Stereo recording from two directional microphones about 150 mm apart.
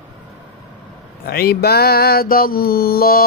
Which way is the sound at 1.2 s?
90° left.